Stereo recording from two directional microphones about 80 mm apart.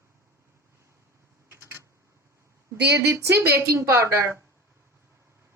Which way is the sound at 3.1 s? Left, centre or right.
Right.